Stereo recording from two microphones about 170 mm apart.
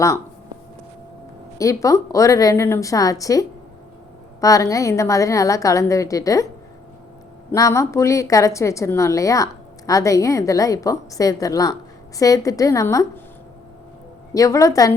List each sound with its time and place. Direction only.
1.5 s a woman's voice: 20° left (ahead or behind)
7.5 s a woman's voice: 20° left (ahead or behind)
14.3 s a woman's voice: 20° left (ahead or behind)